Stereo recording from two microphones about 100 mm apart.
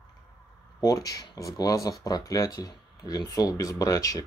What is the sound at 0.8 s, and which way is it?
Speech, 35° left (ahead or behind).